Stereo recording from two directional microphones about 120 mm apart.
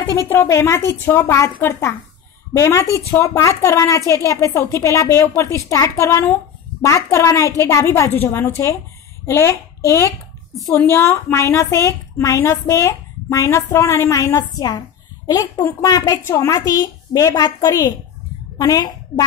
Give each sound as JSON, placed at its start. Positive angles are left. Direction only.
{"t": 0.5, "sound": "a woman's voice", "side_deg": 20}